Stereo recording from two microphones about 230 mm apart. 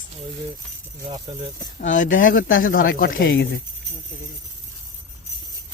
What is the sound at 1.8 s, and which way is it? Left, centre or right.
Speech, left.